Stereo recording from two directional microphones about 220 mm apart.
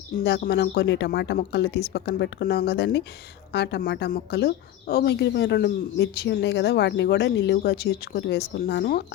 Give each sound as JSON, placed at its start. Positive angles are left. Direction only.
{"t": 0.3, "sound": "a woman's voice", "side_deg": 45}